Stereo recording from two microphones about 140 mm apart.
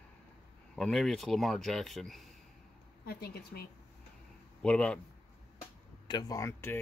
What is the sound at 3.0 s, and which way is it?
Speech, 90° left.